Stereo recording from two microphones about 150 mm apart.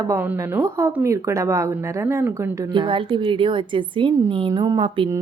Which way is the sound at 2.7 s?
35° right (ahead or behind).